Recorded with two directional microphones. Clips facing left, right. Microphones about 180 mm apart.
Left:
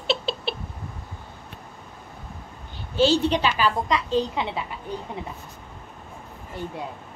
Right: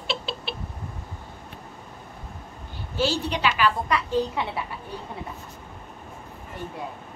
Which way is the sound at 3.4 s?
35° left (ahead or behind).